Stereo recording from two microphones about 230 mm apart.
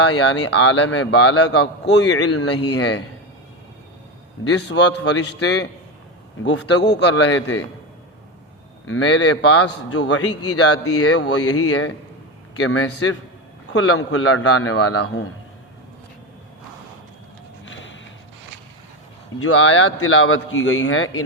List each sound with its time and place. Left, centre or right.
0.0 s a man's voice: left
2.1 s a man's voice: left
2.5 s a man's voice: left
4.4 s a man's voice: left
8.9 s speech: left
9.4 s a man's voice: left
9.6 s a man's voice: left
15.0 s a man's voice: left
17.7 s a sound: left
19.4 s a man's voice: left